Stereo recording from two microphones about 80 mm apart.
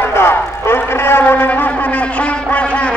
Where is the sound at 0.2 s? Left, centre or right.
Left.